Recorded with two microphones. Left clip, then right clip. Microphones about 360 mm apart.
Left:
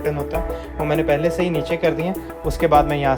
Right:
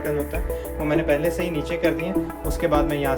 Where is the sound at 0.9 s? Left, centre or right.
Centre.